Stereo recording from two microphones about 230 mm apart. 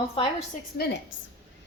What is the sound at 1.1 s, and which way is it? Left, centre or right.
Speech, left.